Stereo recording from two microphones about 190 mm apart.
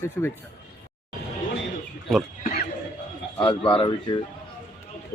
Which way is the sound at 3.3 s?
25° left (ahead or behind).